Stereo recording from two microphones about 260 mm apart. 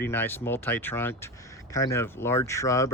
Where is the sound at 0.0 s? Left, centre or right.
Centre.